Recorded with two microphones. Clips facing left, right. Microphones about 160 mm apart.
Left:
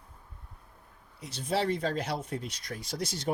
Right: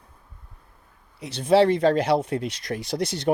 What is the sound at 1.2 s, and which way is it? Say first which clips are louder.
Speech: right 12 dB; 75° right (ahead or behind).